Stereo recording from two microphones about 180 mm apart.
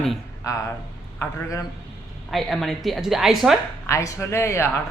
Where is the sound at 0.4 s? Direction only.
20° left (ahead or behind).